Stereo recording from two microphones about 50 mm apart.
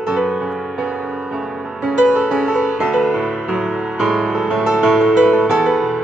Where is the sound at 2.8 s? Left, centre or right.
Centre.